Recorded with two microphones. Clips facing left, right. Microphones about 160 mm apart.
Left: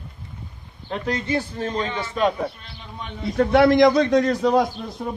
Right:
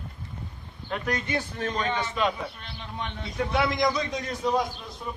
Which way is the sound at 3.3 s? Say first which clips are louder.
Left 11 dB; 60° left (ahead or behind).